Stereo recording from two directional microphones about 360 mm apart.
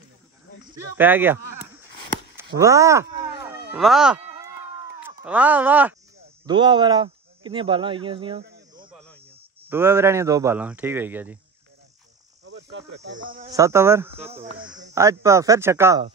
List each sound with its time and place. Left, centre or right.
0.9 s speech: centre
3.7 s a sound: centre
5.2 s speech: centre
12.4 s cricket: right
13.5 s speech: centre